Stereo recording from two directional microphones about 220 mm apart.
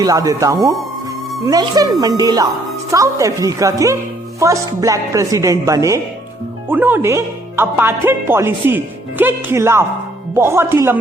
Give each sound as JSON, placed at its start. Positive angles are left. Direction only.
{"t": 0.0, "sound": "speech", "side_deg": -15}